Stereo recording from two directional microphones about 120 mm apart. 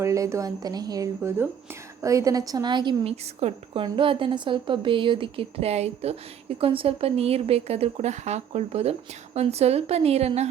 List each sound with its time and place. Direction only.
0.0 s a woman's voice: 25° right (ahead or behind)
3.0 s a woman's voice: 55° right (ahead or behind)